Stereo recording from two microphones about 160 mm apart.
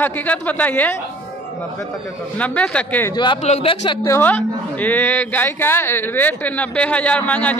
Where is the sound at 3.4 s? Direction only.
45° left (ahead or behind).